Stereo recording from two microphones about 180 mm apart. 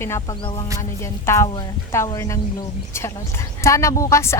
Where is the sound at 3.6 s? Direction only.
15° left (ahead or behind).